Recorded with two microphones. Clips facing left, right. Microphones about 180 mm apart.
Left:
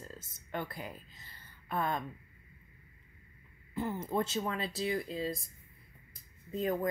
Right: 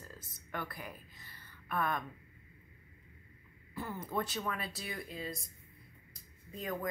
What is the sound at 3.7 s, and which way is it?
Speech, 25° left (ahead or behind).